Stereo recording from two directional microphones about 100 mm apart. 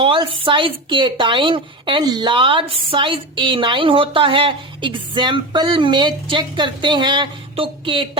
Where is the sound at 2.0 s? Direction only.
45° right (ahead or behind).